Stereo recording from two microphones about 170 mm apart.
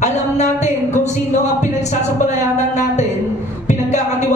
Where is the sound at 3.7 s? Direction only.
45° left (ahead or behind).